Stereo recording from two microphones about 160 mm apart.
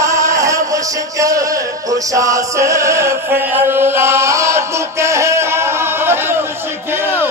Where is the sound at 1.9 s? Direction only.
20° right (ahead or behind).